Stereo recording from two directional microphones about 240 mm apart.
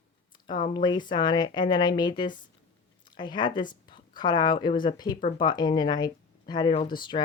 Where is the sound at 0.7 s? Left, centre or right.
Centre.